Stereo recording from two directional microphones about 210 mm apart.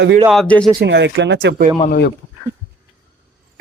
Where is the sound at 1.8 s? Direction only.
50° left (ahead or behind).